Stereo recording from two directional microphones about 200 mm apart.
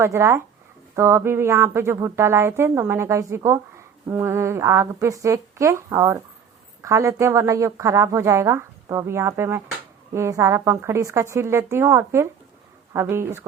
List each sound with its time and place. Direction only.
0.0 s speech: 15° right (ahead or behind)